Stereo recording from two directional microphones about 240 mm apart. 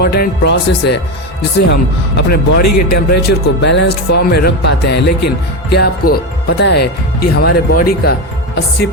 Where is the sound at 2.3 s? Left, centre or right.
Left.